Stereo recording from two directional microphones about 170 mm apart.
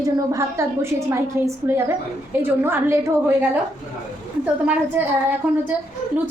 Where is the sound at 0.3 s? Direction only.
15° right (ahead or behind).